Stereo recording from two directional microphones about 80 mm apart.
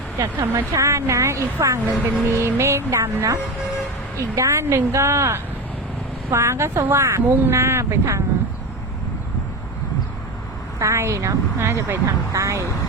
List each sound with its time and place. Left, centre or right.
0.2 s speech: right
2.0 s speech: centre
2.3 s speech: right
4.4 s speech: right
10.8 s speech: right